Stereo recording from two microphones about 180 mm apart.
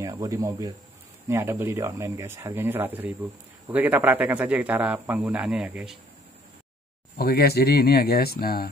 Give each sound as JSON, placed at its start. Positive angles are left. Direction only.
{"t": 0.0, "sound": "speech", "side_deg": -20}
{"t": 7.2, "sound": "speech", "side_deg": 60}